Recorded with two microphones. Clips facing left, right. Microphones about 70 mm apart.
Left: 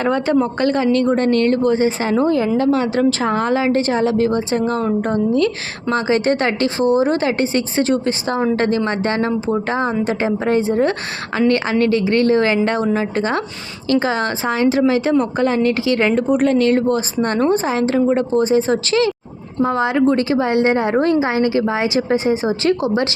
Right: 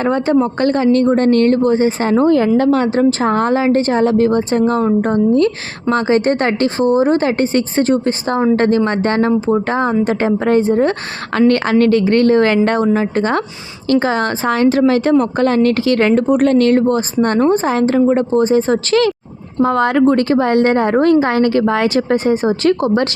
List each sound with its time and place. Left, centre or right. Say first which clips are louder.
0.0 s speech: right 2 dB; right
11.3 s a woman's voice: right 4 dB; right
19.6 s a woman's voice: right 3 dB; right